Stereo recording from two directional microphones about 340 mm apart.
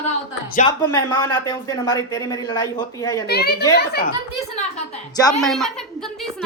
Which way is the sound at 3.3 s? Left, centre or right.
Left.